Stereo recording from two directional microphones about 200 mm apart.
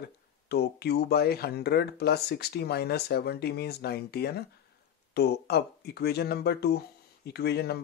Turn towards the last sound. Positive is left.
turn(degrees=55)  # may be behind; listen again after turning